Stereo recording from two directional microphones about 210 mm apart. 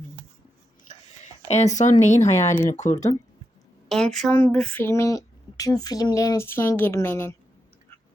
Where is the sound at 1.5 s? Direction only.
35° left (ahead or behind).